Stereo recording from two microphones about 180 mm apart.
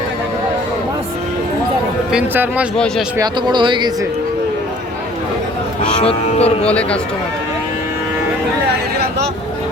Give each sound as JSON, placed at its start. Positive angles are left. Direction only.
{"t": 2.1, "sound": "speech", "side_deg": -10}
{"t": 3.2, "sound": "speech", "side_deg": -25}
{"t": 6.0, "sound": "speech", "side_deg": 35}
{"t": 6.7, "sound": "a man's voice", "side_deg": 5}